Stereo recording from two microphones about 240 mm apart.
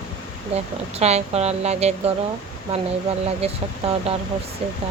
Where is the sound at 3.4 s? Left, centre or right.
Right.